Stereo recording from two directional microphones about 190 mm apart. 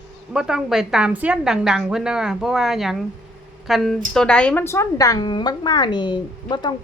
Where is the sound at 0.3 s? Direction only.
5° right (ahead or behind).